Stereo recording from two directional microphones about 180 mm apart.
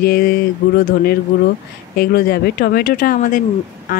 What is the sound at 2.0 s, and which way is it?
Speech, 60° left (ahead or behind).